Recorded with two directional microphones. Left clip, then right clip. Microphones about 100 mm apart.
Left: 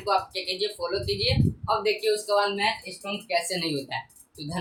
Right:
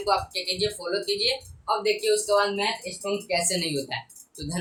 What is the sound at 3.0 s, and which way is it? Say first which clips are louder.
Speech: right 3 dB; 25° right (ahead or behind).